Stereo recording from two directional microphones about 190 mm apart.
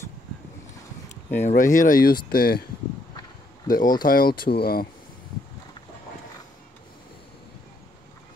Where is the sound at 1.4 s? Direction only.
45° left (ahead or behind).